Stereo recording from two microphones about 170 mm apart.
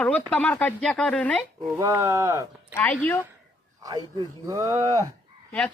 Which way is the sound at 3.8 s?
20° right (ahead or behind).